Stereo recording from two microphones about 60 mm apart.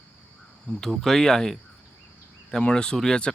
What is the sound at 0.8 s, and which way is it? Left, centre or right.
Speech, centre.